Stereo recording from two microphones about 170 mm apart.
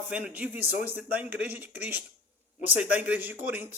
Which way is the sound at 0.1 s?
10° right (ahead or behind).